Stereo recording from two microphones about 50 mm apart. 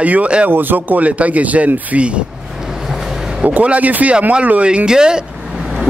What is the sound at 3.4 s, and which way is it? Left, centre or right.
Speech, right.